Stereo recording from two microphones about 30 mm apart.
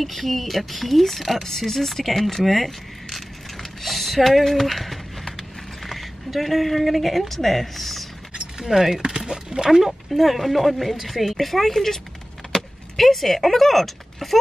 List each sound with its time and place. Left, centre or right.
0.0 s a woman's voice: centre
8.5 s speech: centre
10.1 s speech: centre